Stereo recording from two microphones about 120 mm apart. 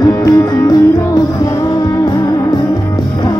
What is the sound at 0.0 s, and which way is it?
Music, 30° left (ahead or behind).